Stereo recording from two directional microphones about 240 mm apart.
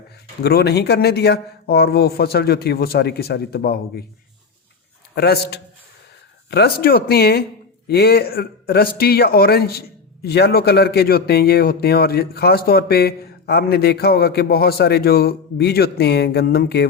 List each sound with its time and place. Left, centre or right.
0.4 s speech: left
5.1 s speech: left